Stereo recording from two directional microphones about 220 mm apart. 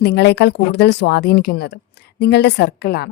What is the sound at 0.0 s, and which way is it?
A woman's voice, 50° left (ahead or behind).